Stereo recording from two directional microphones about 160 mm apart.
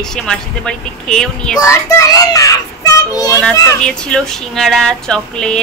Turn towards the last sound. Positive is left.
turn(degrees=5)  # may be behind; listen again after turning